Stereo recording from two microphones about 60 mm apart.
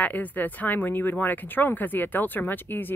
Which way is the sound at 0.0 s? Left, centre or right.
Left.